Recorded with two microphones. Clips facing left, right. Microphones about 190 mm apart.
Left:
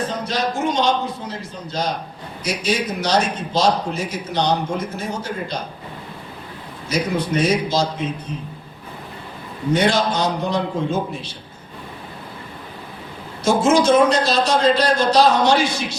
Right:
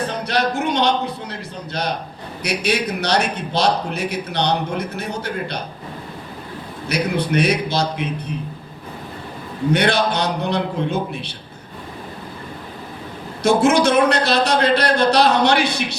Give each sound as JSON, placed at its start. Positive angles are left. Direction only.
{"t": 0.1, "sound": "a man's voice", "side_deg": -65}
{"t": 6.8, "sound": "a man's voice", "side_deg": -65}
{"t": 9.7, "sound": "a man's voice", "side_deg": -65}
{"t": 13.4, "sound": "a man's voice", "side_deg": -65}